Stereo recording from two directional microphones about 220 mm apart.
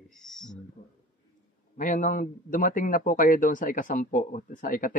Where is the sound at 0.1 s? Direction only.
Centre (ahead or behind).